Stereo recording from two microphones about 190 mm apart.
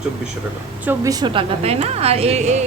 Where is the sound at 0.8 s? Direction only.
15° right (ahead or behind).